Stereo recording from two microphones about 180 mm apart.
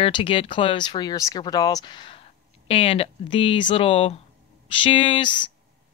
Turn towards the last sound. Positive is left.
turn(degrees=25)  # may be behind; listen again after turning